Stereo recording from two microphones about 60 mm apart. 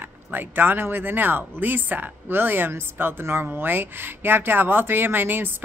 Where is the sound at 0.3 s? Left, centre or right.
Right.